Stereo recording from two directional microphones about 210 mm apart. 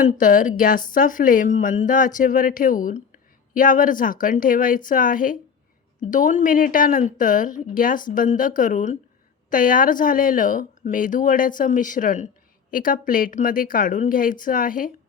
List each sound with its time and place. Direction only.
0.2 s speech: 40° left (ahead or behind)